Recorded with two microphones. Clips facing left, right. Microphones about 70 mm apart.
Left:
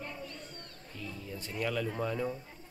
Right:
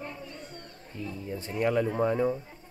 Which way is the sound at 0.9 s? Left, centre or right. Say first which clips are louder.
Right 7 dB; right.